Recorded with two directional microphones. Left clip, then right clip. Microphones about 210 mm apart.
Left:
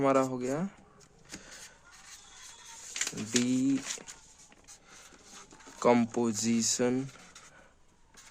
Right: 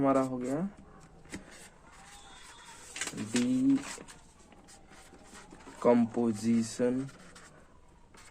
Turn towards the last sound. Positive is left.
turn(degrees=50)  # may be behind; listen again after turning